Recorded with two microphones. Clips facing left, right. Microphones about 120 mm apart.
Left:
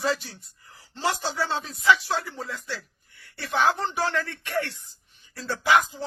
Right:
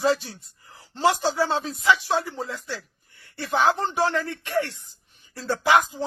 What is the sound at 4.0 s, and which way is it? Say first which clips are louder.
Speech: right 3 dB; 15° right (ahead or behind).